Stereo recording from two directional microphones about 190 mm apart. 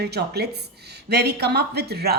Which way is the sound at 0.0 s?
60° right (ahead or behind).